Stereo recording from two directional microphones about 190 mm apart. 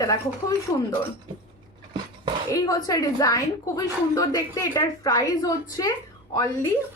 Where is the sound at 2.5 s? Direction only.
20° left (ahead or behind).